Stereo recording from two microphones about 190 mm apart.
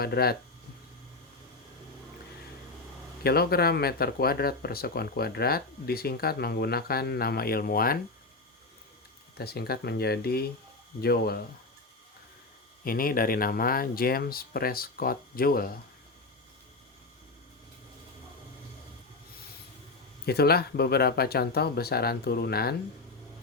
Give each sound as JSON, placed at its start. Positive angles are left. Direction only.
{"t": 0.0, "sound": "speech", "side_deg": 55}
{"t": 3.2, "sound": "speech", "side_deg": 55}
{"t": 9.4, "sound": "speech", "side_deg": 55}
{"t": 12.8, "sound": "speech", "side_deg": 50}
{"t": 20.2, "sound": "speech", "side_deg": 55}